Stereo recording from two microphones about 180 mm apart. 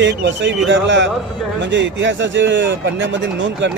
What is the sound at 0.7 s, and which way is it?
Speech, 90° right.